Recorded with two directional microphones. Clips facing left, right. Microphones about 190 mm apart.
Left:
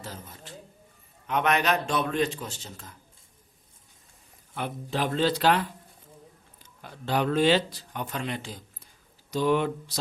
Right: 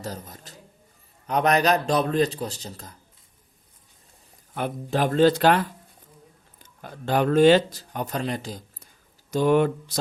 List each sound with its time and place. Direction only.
0.0 s a man's voice: 40° right (ahead or behind)
4.5 s speech: 45° right (ahead or behind)